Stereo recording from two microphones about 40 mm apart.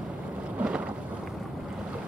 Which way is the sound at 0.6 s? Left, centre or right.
Right.